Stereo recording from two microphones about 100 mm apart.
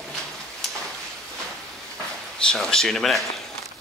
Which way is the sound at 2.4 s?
5° left (ahead or behind).